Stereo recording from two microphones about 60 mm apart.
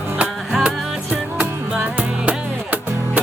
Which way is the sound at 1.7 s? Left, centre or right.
Centre.